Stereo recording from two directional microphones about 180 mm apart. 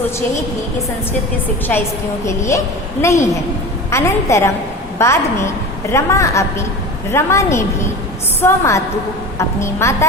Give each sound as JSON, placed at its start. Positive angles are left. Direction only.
{"t": 2.2, "sound": "a woman's voice", "side_deg": 15}